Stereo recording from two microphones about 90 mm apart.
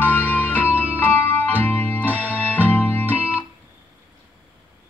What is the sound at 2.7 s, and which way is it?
Music, 20° left (ahead or behind).